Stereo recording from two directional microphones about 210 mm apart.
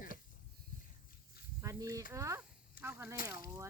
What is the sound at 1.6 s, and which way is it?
Speech, 15° right (ahead or behind).